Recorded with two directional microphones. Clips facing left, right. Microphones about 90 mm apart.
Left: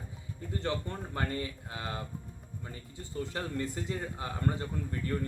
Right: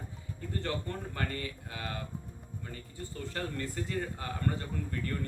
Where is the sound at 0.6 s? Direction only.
20° left (ahead or behind).